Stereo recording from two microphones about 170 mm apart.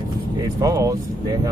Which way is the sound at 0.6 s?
20° right (ahead or behind).